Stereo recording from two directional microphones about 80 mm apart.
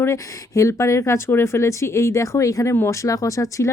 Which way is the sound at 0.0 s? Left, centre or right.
Left.